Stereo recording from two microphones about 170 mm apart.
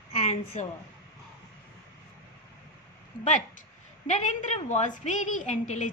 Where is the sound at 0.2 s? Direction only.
40° left (ahead or behind).